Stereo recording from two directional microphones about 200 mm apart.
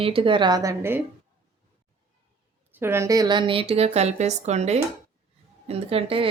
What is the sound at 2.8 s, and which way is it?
A woman's voice, 15° right (ahead or behind).